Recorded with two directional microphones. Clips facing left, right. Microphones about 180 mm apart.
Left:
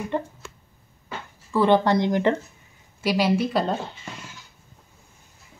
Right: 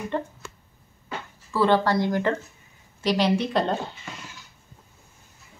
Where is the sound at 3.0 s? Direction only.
5° left (ahead or behind).